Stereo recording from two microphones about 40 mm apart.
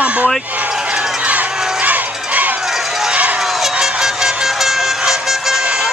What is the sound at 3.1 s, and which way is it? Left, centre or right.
Run, right.